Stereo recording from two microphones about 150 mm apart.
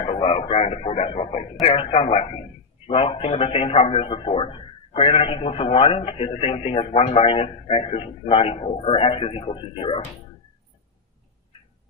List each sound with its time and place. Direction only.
0.0 s a man's voice: 40° left (ahead or behind)